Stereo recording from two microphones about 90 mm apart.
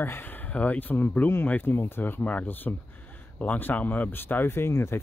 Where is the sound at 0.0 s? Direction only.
20° left (ahead or behind).